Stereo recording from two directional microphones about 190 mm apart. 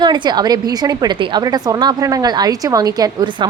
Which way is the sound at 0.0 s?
20° right (ahead or behind).